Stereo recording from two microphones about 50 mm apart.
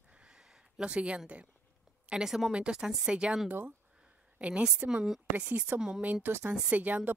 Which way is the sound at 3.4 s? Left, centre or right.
Right.